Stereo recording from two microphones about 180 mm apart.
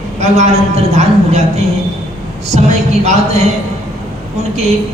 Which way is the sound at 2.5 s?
40° right (ahead or behind).